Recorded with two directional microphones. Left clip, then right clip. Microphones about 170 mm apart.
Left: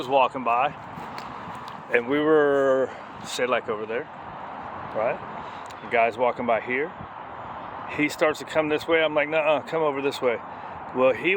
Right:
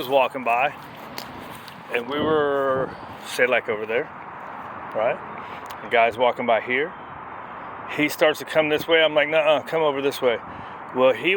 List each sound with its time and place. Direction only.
0.0 s speech: 5° left (ahead or behind)
1.9 s speech: 40° left (ahead or behind)
3.5 s speech: centre (ahead or behind)
7.9 s speech: centre (ahead or behind)